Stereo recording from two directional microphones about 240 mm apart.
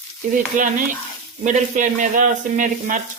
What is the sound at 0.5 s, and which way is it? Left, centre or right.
Speech, right.